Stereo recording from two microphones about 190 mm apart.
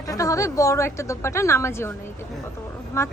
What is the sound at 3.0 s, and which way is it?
Speech, 15° left (ahead or behind).